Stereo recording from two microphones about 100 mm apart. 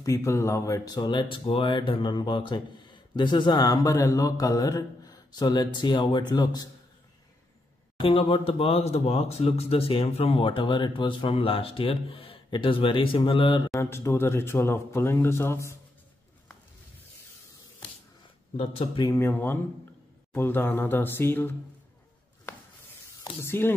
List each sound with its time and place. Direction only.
0.0 s speech: 30° left (ahead or behind)
1.0 s speech: 55° left (ahead or behind); by 6.7 s 40° left (ahead or behind)
8.0 s speech: 65° left (ahead or behind)
13.7 s speech: 25° left (ahead or behind)
19.0 s speech: 25° left (ahead or behind)
23.4 s speech: 25° left (ahead or behind)